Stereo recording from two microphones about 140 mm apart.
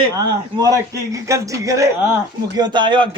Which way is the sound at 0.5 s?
25° right (ahead or behind).